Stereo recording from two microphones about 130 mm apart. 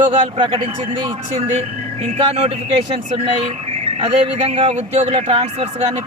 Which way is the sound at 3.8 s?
50° right (ahead or behind).